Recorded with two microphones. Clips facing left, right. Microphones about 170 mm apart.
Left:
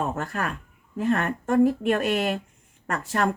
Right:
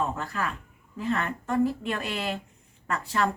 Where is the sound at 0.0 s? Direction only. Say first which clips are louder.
Left 2 dB; 45° left (ahead or behind).